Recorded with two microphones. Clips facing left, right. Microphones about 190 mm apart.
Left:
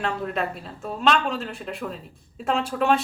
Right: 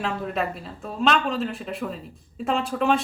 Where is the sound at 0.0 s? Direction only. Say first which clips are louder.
Even; centre (ahead or behind).